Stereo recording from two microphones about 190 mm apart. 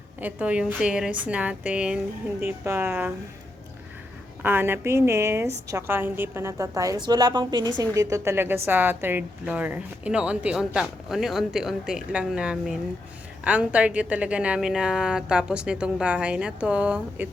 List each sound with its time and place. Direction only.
0.2 s a woman's voice: 10° right (ahead or behind)
4.4 s a woman's voice: 10° right (ahead or behind)